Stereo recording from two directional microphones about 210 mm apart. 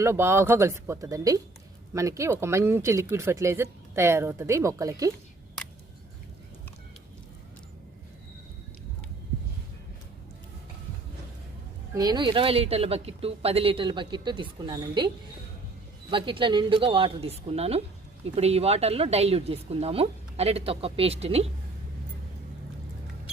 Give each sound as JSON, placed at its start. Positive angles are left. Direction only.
{"t": 0.0, "sound": "speech", "side_deg": -10}
{"t": 11.9, "sound": "speech", "side_deg": -20}